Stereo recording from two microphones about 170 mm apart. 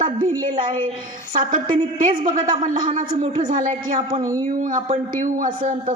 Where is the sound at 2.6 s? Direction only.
50° right (ahead or behind).